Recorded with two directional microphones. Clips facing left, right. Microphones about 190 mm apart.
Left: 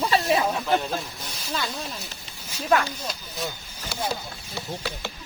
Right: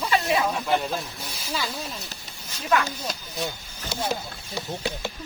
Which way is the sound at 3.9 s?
15° right (ahead or behind).